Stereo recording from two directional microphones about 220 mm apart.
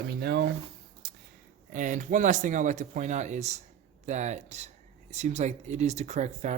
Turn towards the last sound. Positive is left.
turn(degrees=-30)  # may be behind; listen again after turning